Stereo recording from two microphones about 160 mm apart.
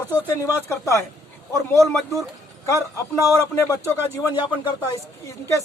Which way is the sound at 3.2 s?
15° right (ahead or behind).